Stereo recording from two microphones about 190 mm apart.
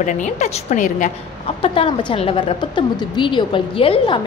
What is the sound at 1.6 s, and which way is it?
A woman's voice, 30° left (ahead or behind).